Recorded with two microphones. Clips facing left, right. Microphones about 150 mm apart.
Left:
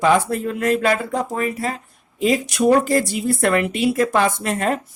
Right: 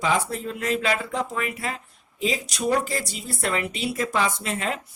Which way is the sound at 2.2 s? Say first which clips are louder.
Left 9 dB; 55° left (ahead or behind).